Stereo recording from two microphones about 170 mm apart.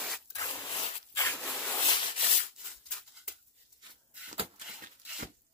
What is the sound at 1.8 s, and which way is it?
Rub, 30° left (ahead or behind).